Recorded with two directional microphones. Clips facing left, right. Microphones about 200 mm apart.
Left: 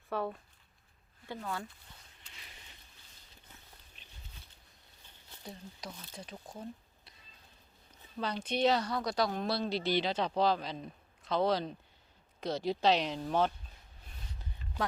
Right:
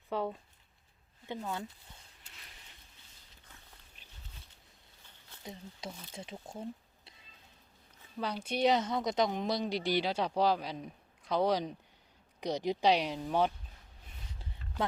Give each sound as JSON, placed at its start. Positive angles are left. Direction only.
{"t": 0.1, "sound": "speech", "side_deg": -15}
{"t": 5.4, "sound": "speech", "side_deg": -20}
{"t": 8.2, "sound": "speech", "side_deg": -10}